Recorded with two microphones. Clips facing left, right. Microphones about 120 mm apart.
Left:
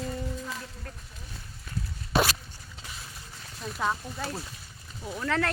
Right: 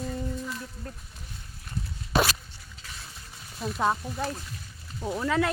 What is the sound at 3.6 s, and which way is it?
Speech, 5° right (ahead or behind).